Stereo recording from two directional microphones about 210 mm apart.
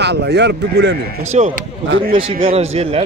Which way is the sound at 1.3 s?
30° right (ahead or behind).